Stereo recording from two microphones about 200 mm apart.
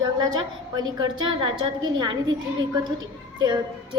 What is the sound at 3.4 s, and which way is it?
Speech, 20° right (ahead or behind).